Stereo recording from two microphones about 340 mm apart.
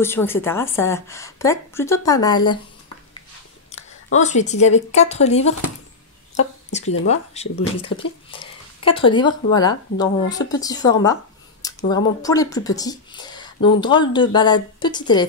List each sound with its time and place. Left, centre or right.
0.0 s speech: centre
4.2 s speech: left
6.8 s speech: left
7.1 s speech: centre